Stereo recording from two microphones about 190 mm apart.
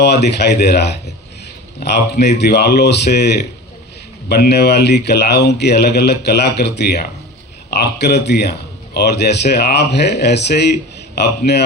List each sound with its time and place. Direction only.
0.0 s a man's voice: 60° left (ahead or behind)